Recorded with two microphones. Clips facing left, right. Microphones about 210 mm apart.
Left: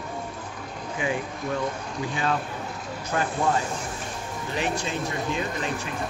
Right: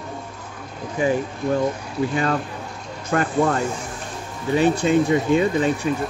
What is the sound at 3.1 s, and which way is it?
Speech, 65° right (ahead or behind).